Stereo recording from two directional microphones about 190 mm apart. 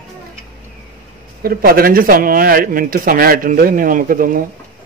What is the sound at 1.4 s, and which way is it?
Speech, 50° right (ahead or behind).